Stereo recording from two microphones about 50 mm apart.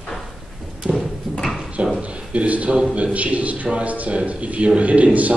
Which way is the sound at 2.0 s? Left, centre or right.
Right.